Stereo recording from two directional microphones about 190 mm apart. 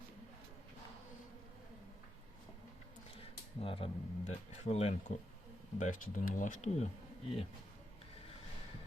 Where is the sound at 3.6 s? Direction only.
30° left (ahead or behind).